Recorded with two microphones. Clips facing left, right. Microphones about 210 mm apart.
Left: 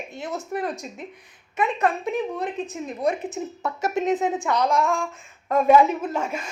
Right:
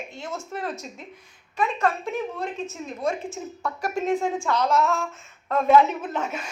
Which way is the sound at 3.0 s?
20° left (ahead or behind).